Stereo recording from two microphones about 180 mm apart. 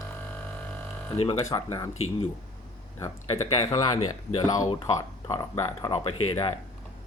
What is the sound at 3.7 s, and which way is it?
Speech, 20° left (ahead or behind).